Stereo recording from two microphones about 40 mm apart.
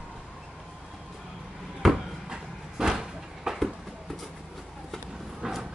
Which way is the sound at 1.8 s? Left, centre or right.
Centre.